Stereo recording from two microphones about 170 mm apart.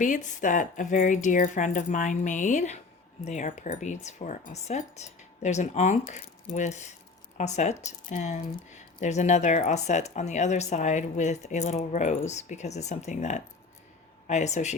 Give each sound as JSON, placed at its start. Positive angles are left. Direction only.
{"t": 0.0, "sound": "speech", "side_deg": 50}